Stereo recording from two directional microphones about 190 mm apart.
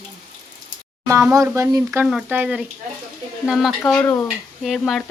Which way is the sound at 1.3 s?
15° right (ahead or behind).